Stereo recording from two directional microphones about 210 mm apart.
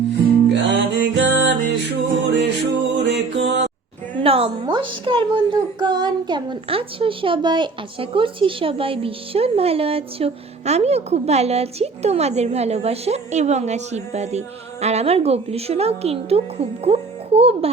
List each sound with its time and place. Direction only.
0.4 s music: 60° right (ahead or behind)
4.2 s a child's voice: 25° right (ahead or behind)